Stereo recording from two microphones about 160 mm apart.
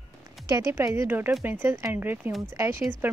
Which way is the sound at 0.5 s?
20° right (ahead or behind).